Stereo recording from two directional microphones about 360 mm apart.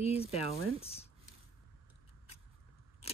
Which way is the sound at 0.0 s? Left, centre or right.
Centre.